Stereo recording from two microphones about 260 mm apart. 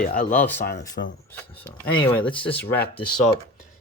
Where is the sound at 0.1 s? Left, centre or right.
Left.